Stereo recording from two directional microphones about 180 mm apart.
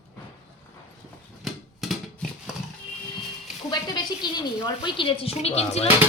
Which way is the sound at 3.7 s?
25° left (ahead or behind).